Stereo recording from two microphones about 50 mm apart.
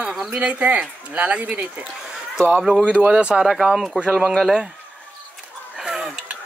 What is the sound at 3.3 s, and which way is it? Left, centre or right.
Speech, centre.